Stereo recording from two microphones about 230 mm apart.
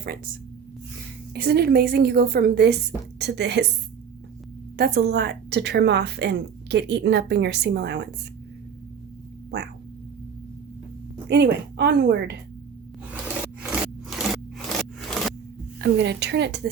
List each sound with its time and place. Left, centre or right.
1.3 s a woman's voice: right
4.8 s a woman's voice: right
11.3 s a woman's voice: right
13.6 s a sound: centre
14.7 s scrape: centre
15.8 s a woman's voice: right